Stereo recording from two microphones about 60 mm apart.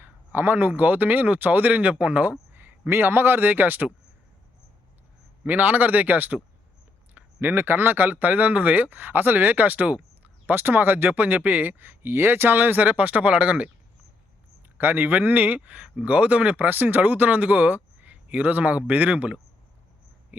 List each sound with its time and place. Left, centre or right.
0.3 s a man's voice: right
5.5 s speech: right
14.8 s a man's voice: right